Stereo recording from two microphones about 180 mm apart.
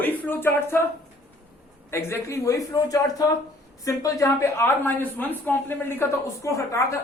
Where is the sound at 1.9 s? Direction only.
15° left (ahead or behind).